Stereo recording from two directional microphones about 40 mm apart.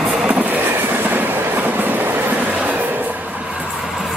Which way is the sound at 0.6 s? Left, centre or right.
Right.